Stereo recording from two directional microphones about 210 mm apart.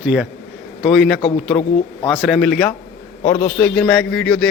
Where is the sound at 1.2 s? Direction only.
25° left (ahead or behind).